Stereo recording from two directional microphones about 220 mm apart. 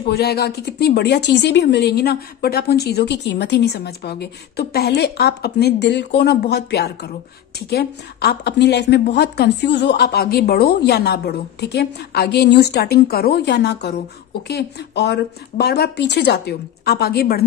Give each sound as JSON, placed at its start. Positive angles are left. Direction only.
{"t": 0.0, "sound": "a woman's voice", "side_deg": 45}